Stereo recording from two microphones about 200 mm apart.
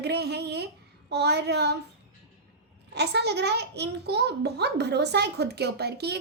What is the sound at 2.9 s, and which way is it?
A woman's voice, 55° right (ahead or behind).